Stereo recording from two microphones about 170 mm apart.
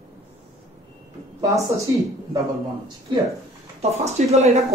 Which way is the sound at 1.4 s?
20° right (ahead or behind).